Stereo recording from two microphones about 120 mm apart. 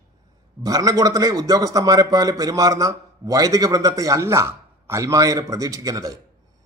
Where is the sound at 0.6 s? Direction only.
30° right (ahead or behind).